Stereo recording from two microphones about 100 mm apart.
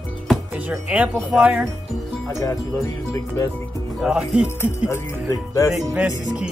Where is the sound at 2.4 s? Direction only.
30° left (ahead or behind).